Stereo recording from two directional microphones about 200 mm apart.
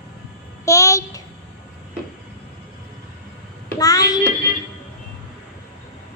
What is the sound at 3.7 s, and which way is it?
Child singing, 15° left (ahead or behind).